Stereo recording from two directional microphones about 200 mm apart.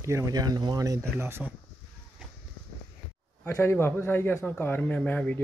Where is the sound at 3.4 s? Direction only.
10° left (ahead or behind).